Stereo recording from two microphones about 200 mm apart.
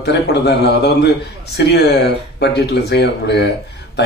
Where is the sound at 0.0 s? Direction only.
55° left (ahead or behind).